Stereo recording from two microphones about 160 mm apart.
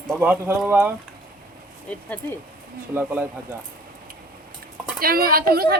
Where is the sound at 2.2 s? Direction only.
10° left (ahead or behind).